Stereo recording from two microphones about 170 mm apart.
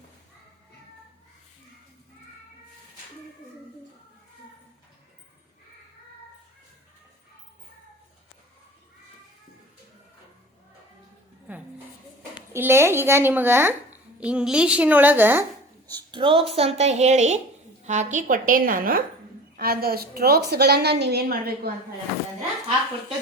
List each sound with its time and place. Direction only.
12.5 s a woman's voice: 15° right (ahead or behind)
16.1 s a woman's voice: 30° right (ahead or behind); by 21.7 s 65° right (ahead or behind)